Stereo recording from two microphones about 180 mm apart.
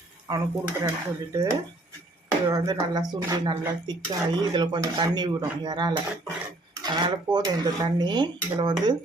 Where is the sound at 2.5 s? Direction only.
20° right (ahead or behind).